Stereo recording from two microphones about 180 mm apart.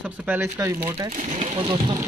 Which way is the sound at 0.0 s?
10° right (ahead or behind).